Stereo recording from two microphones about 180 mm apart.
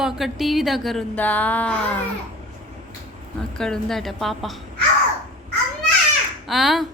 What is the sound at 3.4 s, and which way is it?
Speech, 5° left (ahead or behind).